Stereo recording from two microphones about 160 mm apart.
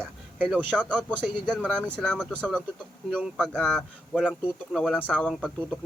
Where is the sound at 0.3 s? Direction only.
10° right (ahead or behind).